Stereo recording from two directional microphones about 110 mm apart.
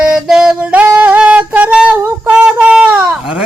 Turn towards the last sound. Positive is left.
turn(degrees=-5)  # may be behind; listen again after turning